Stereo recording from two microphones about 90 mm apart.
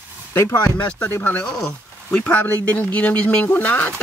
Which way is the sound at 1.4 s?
10° left (ahead or behind).